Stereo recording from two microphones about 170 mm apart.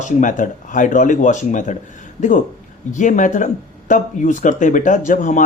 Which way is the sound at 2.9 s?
50° left (ahead or behind).